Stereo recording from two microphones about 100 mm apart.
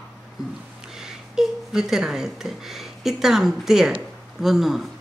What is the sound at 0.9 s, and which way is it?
Speech, 5° right (ahead or behind).